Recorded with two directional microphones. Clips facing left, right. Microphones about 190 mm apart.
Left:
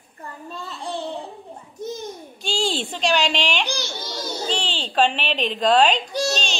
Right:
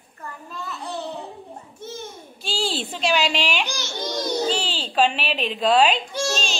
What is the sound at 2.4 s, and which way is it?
A child's voice, centre (ahead or behind).